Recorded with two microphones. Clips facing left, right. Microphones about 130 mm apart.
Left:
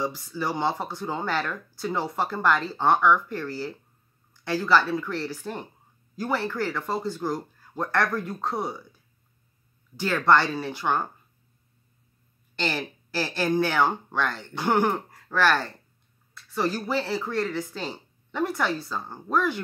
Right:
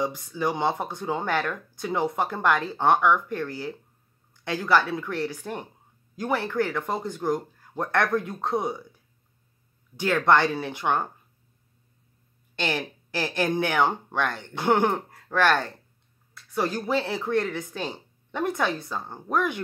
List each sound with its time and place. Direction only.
0.0 s speech: 20° right (ahead or behind)
9.9 s speech: 20° right (ahead or behind)
13.2 s speech: 20° right (ahead or behind)
16.5 s speech: 20° right (ahead or behind)